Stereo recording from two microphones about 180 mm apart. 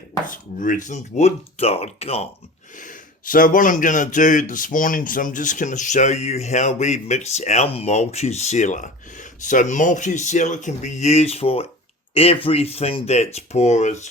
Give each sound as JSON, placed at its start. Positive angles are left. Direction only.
{"t": 0.3, "sound": "speech", "side_deg": 45}
{"t": 2.7, "sound": "speech", "side_deg": 45}